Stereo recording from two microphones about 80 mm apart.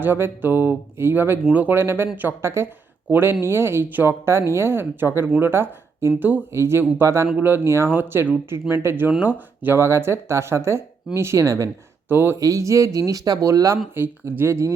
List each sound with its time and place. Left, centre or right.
0.0 s speech: right
12.0 s speech: right
12.4 s speech: right
13.9 s speech: right